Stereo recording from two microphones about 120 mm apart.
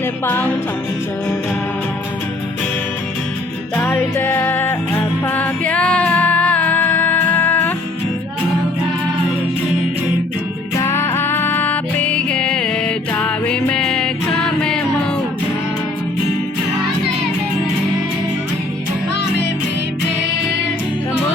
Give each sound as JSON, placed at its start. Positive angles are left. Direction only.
{"t": 3.8, "sound": "music", "side_deg": 20}
{"t": 10.8, "sound": "music", "side_deg": 20}